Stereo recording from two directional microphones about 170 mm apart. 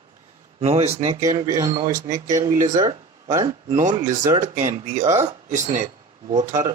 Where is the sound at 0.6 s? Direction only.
40° right (ahead or behind).